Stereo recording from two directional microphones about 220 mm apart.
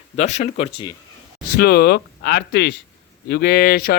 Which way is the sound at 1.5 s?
45° left (ahead or behind).